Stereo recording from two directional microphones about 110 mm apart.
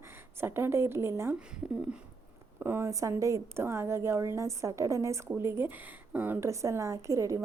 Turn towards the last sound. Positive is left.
turn(degrees=-30)  # may be behind; listen again after turning